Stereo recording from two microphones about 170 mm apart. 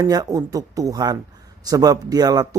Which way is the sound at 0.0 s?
20° right (ahead or behind).